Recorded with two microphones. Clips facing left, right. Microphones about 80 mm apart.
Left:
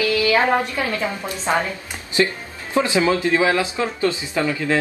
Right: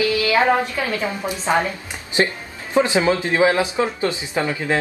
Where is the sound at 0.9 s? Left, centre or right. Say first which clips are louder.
Right 1 dB; centre.